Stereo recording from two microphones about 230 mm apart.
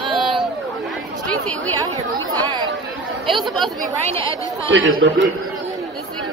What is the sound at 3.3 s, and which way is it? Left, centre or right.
Speech, centre.